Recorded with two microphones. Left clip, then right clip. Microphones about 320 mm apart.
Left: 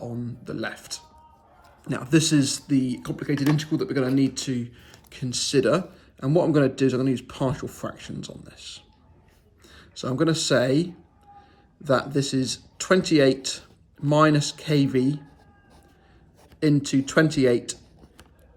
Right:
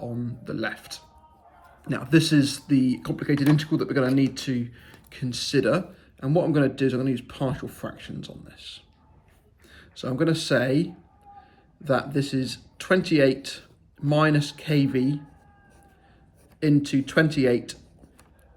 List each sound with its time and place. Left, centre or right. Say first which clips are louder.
0.0 s a sound: right 1 dB; centre
1.8 s speech: even; centre
10.0 s speech: left 1 dB; centre
11.9 s speech: left 2 dB; centre
16.6 s speech: even; centre